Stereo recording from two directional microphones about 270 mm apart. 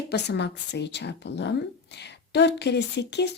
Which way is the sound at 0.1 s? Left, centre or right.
Left.